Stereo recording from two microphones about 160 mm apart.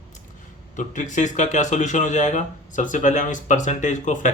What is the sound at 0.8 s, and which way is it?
Speech, 50° left (ahead or behind).